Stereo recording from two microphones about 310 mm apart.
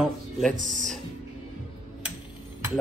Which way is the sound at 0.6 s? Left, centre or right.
Right.